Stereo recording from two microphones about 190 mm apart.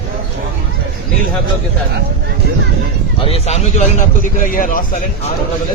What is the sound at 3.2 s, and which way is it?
A man's voice, 35° left (ahead or behind).